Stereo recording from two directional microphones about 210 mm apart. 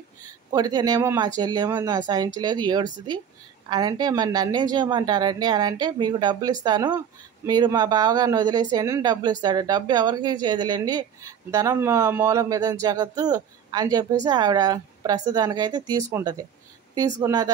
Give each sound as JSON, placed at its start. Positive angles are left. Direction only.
{"t": 0.5, "sound": "a woman's voice", "side_deg": -20}